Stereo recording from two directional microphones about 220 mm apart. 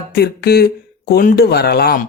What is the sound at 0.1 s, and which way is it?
Speech, 45° left (ahead or behind).